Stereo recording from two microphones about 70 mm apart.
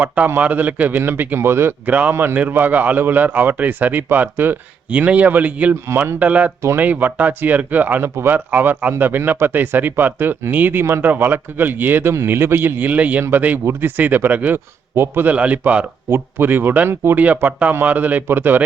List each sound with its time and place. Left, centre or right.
0.4 s speech: right
1.9 s speech: right
2.1 s speech: right
5.9 s speech: right
6.1 s speech: right
8.1 s speech: right
15.3 s speech: right
16.0 s speech: right